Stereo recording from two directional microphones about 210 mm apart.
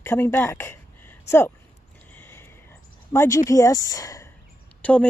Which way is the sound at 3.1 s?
10° left (ahead or behind).